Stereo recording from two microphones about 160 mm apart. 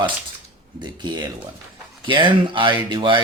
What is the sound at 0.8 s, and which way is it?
Speech, 30° right (ahead or behind).